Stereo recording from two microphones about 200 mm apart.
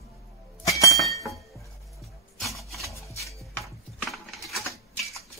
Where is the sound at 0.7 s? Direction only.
15° left (ahead or behind).